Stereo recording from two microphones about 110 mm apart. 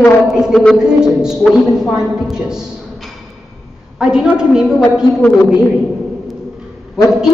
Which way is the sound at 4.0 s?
5° right (ahead or behind).